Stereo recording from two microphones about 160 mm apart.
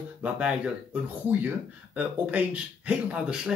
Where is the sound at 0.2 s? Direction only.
5° right (ahead or behind).